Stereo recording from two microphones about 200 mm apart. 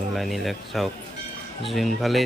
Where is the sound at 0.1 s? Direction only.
Centre (ahead or behind).